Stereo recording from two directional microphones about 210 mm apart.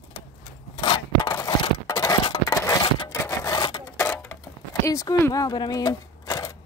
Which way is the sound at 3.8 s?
10° left (ahead or behind).